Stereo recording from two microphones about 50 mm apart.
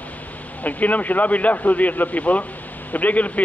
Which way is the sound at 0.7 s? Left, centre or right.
Left.